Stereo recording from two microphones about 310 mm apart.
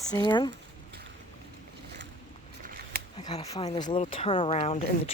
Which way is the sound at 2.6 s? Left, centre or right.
Right.